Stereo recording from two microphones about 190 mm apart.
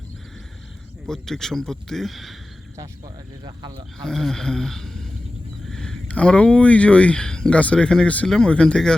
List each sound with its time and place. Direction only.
1.0 s speech: 5° left (ahead or behind)
3.4 s speech: 25° right (ahead or behind)
4.0 s speech: centre (ahead or behind)